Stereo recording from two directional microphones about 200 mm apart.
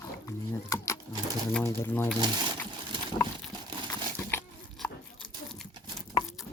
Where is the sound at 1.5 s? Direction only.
10° left (ahead or behind).